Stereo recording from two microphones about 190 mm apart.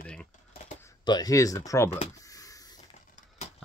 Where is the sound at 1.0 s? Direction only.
20° left (ahead or behind).